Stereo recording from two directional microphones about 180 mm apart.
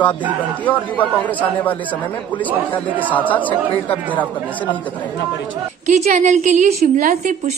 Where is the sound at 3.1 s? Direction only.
10° left (ahead or behind).